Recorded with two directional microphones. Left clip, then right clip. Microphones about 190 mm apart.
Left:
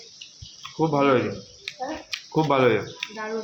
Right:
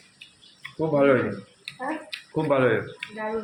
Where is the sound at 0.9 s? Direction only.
30° left (ahead or behind).